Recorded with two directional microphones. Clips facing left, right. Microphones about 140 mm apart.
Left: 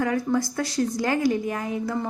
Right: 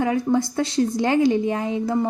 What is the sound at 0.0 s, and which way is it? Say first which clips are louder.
A woman's voice: right 3 dB; 25° right (ahead or behind).